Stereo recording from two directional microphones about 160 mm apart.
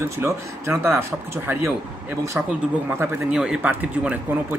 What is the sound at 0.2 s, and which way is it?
Speech, 15° right (ahead or behind).